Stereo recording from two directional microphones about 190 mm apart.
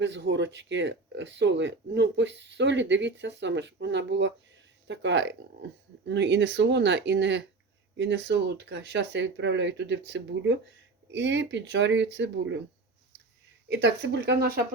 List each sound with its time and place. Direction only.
0.0 s speech: 65° right (ahead or behind)
13.8 s speech: 65° right (ahead or behind)